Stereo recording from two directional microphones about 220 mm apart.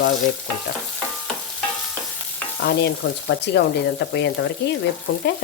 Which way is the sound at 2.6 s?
50° left (ahead or behind).